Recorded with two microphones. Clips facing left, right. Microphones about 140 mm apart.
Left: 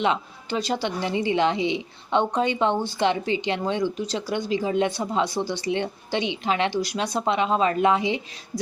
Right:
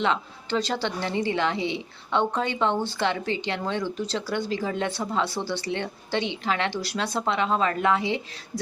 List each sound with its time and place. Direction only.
0.0 s a woman's voice: 15° left (ahead or behind)